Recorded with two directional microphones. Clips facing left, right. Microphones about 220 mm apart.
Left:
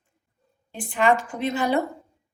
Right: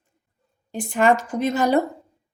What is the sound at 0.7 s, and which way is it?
A woman's voice, 45° right (ahead or behind).